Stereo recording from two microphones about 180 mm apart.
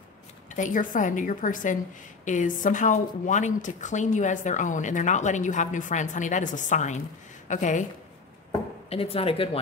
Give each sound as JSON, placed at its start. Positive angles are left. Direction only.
{"t": 0.5, "sound": "speech", "side_deg": 45}
{"t": 8.8, "sound": "speech", "side_deg": 35}